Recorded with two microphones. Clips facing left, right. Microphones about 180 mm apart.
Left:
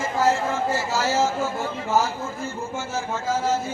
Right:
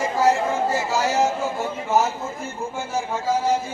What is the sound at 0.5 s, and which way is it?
A man's voice, 15° right (ahead or behind).